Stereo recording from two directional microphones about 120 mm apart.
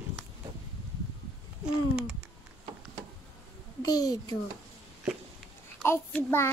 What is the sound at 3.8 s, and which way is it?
Speech, 30° left (ahead or behind).